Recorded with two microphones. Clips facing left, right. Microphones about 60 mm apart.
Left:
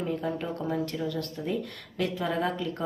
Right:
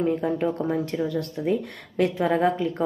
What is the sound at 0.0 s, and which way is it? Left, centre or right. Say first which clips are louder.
Speech: right 7 dB; right.